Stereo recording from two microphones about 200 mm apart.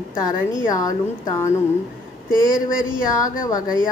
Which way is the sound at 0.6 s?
15° left (ahead or behind).